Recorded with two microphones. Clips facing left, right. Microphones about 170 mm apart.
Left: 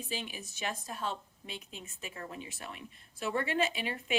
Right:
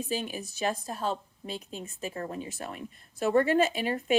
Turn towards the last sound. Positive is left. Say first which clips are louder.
# right 6 dB
turn(degrees=-45)  # may be behind; listen again after turning